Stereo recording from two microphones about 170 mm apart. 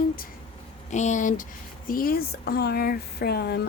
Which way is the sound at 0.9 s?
45° left (ahead or behind).